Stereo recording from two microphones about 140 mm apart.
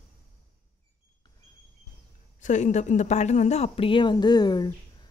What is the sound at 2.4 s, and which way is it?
Speech, 60° left (ahead or behind).